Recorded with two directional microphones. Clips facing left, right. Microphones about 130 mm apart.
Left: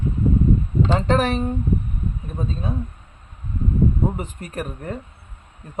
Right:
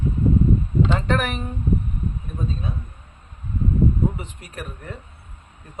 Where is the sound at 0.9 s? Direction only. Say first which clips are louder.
Left 4 dB; 30° left (ahead or behind).